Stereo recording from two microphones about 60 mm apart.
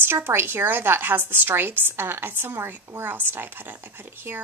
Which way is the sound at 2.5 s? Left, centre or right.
Right.